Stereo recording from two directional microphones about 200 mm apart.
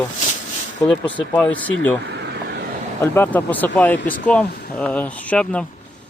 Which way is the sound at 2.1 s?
60° right (ahead or behind).